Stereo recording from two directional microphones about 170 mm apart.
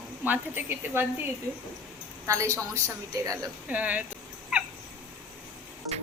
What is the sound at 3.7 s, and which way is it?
Speech, 10° right (ahead or behind).